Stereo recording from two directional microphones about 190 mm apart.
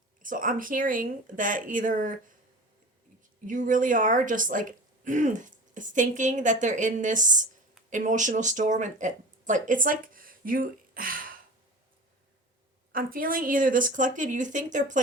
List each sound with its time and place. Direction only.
0.2 s a woman's voice: 45° right (ahead or behind)
3.4 s a woman's voice: 45° right (ahead or behind)
12.9 s a woman's voice: 50° right (ahead or behind)